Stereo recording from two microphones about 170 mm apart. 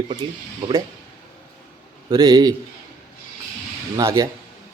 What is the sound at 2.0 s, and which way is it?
Speech, 25° right (ahead or behind).